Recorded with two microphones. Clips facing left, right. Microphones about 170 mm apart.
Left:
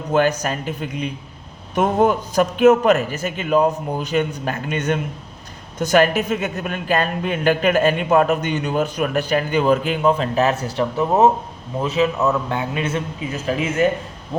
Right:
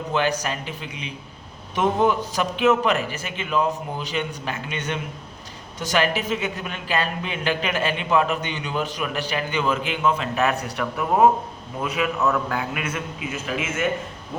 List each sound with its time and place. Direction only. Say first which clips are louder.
0.1 s a man's voice: left 6 dB; 45° left (ahead or behind)